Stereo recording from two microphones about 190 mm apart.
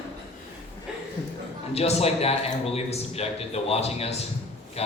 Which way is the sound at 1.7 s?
35° left (ahead or behind).